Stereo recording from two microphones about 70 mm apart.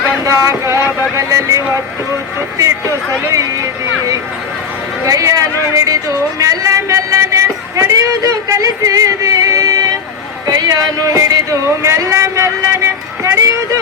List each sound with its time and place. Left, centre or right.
0.3 s speech: right
5.0 s a man's voice: right
10.4 s a sound: right
11.8 s speech: right